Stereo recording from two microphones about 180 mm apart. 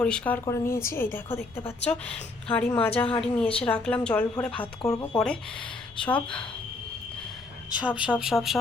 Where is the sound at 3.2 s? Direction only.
5° left (ahead or behind).